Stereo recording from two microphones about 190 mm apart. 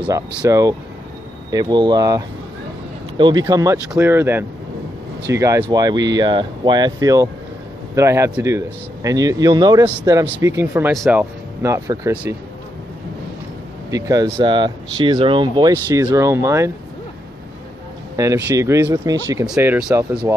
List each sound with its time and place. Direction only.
0.0 s speech: 10° right (ahead or behind)
13.8 s speech: 20° right (ahead or behind)
18.1 s speech: 15° right (ahead or behind)